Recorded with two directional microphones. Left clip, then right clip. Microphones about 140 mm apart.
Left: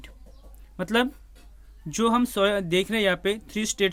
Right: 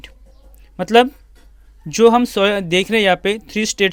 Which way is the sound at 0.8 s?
30° right (ahead or behind).